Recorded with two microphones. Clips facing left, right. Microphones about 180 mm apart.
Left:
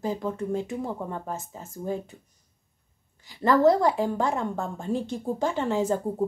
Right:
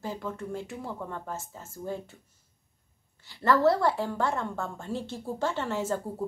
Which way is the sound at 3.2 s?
15° left (ahead or behind).